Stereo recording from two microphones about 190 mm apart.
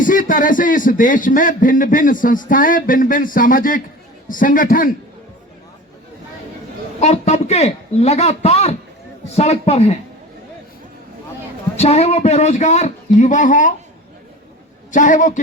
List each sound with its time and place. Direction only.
0.0 s speech: 45° left (ahead or behind)
7.0 s a man's voice: 35° left (ahead or behind)
11.8 s a man's voice: 35° left (ahead or behind)
14.9 s a man's voice: 40° left (ahead or behind)